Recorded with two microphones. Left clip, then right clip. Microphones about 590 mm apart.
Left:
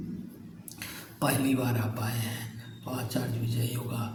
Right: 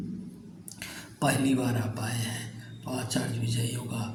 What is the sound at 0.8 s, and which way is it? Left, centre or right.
Speech, left.